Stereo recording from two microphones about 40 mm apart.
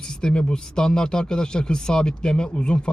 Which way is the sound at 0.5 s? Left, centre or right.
Centre.